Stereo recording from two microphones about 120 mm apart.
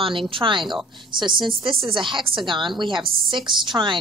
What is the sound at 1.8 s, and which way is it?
A woman's voice, 45° right (ahead or behind).